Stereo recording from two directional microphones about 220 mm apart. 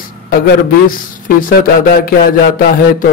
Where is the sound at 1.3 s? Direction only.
40° left (ahead or behind).